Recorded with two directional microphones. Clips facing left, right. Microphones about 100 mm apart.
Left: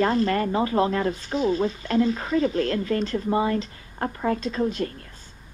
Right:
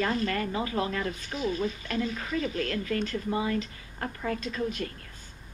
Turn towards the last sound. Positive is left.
turn(degrees=30)  # may be behind; listen again after turning